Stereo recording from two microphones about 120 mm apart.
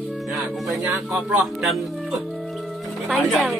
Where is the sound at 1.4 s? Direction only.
Centre (ahead or behind).